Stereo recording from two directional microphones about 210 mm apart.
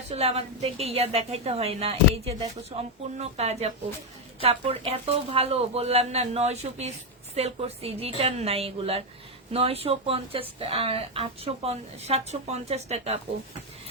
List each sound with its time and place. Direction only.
0.1 s a woman's voice: 30° right (ahead or behind)